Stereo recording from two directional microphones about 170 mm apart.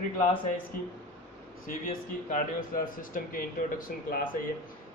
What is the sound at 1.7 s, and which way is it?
Speech, 50° left (ahead or behind).